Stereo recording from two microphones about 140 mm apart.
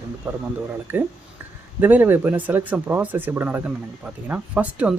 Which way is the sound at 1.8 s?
15° right (ahead or behind).